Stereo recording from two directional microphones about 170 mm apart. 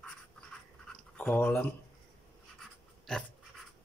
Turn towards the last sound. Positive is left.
turn(degrees=0)  # may be behind; listen again after turning